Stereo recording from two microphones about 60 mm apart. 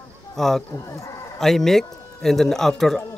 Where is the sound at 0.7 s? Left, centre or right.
Left.